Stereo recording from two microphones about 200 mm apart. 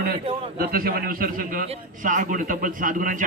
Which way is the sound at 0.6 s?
50° right (ahead or behind).